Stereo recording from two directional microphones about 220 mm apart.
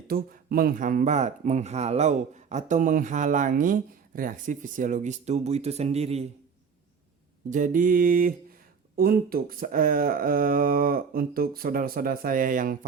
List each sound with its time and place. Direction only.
0.1 s speech: 40° right (ahead or behind)
7.5 s speech: 35° right (ahead or behind)